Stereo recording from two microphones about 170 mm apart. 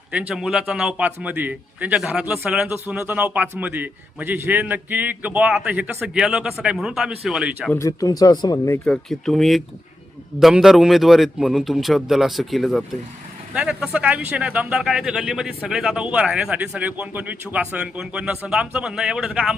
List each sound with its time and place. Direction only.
0.1 s a man's voice: 5° right (ahead or behind)
7.7 s speech: 20° left (ahead or behind)
9.0 s speech: centre (ahead or behind)